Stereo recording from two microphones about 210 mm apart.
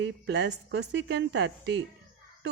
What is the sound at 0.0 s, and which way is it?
A woman's voice, 55° right (ahead or behind).